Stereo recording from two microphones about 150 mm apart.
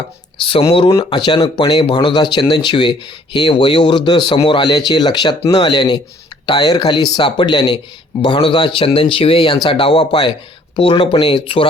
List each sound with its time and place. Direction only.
0.3 s speech: 35° left (ahead or behind)